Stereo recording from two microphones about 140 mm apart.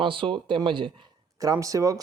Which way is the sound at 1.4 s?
25° right (ahead or behind).